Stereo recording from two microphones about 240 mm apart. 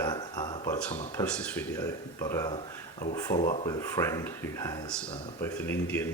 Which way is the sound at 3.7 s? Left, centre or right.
Centre.